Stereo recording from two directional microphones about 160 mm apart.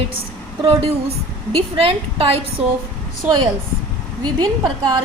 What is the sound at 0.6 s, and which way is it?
A woman's voice, 35° right (ahead or behind).